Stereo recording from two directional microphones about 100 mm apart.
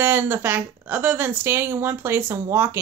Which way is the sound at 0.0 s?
25° right (ahead or behind).